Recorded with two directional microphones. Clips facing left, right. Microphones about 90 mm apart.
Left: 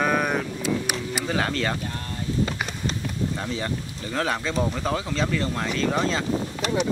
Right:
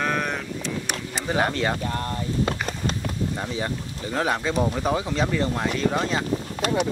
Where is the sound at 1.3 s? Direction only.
15° right (ahead or behind).